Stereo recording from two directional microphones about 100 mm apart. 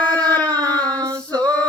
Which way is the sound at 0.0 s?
45° right (ahead or behind).